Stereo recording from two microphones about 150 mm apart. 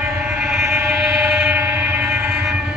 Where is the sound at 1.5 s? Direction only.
15° right (ahead or behind).